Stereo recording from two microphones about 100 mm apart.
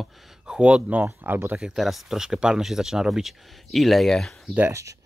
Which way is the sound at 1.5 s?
5° right (ahead or behind).